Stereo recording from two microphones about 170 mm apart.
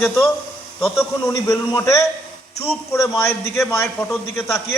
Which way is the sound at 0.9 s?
20° left (ahead or behind).